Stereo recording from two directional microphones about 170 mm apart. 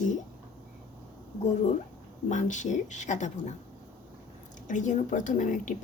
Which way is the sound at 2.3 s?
45° left (ahead or behind).